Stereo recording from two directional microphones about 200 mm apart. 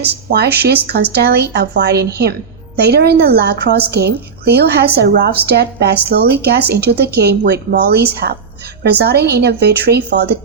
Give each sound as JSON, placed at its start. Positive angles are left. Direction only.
{"t": 0.3, "sound": "a woman's voice", "side_deg": -55}